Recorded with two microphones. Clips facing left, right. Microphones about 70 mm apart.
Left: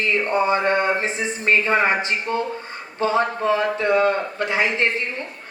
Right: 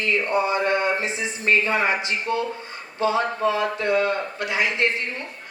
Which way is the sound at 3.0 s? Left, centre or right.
Left.